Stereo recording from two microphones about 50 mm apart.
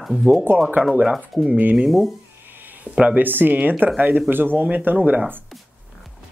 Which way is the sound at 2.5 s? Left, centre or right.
Right.